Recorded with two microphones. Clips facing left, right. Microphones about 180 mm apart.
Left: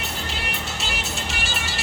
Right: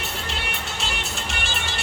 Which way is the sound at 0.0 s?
Centre (ahead or behind).